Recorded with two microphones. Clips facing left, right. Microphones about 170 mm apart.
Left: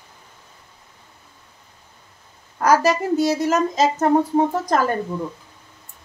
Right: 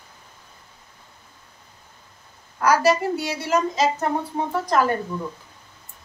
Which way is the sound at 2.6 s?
45° left (ahead or behind).